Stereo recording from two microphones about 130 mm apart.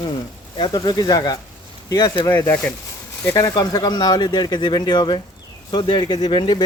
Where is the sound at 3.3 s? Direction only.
30° left (ahead or behind).